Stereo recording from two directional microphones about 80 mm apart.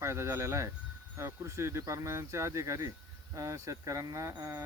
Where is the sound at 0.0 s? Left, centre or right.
Right.